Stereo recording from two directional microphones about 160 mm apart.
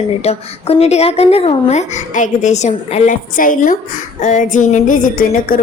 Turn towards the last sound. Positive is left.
turn(degrees=60)  # may be behind; listen again after turning